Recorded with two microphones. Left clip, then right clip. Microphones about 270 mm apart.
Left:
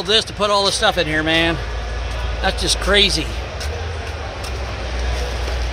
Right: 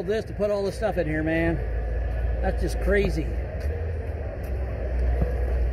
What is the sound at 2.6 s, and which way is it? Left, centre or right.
Speech, centre.